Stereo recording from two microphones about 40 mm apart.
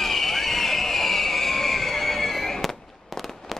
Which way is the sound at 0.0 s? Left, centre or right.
Centre.